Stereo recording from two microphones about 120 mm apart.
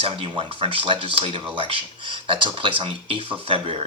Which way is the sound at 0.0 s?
45° right (ahead or behind).